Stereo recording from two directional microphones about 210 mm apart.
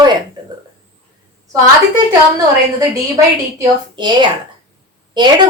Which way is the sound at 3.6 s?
20° right (ahead or behind).